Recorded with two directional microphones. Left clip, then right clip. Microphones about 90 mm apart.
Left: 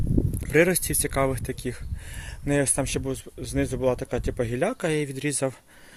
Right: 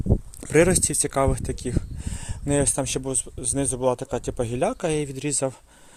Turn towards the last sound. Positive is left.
turn(degrees=0)  # may be behind; listen again after turning